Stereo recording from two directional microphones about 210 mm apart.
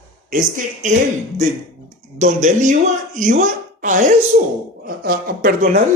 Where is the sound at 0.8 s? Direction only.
35° right (ahead or behind).